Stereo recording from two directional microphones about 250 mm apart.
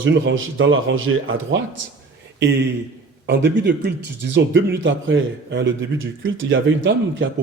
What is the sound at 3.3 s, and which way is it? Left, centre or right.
Speech, right.